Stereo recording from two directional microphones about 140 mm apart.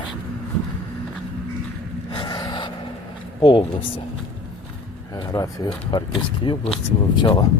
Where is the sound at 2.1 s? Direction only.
30° left (ahead or behind).